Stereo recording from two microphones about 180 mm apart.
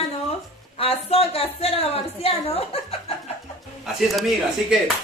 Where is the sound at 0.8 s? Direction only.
35° left (ahead or behind).